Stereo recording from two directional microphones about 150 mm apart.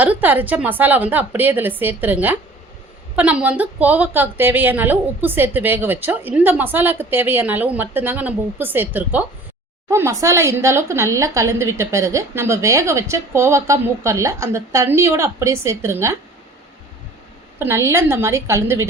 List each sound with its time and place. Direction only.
0.0 s a woman's voice: 10° right (ahead or behind)
17.6 s a woman's voice: 15° right (ahead or behind)